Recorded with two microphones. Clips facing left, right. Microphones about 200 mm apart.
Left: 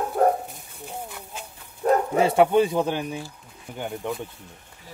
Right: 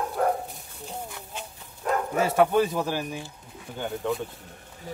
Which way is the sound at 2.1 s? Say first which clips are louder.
Left 1 dB; 20° left (ahead or behind).